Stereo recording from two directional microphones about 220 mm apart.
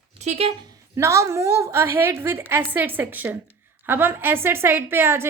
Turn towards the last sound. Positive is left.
turn(degrees=-10)  # may be behind; listen again after turning